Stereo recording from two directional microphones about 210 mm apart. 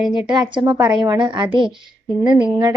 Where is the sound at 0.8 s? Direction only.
5° right (ahead or behind).